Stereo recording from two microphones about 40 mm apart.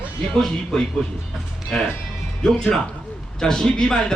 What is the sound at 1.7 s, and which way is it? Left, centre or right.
A man's voice, centre.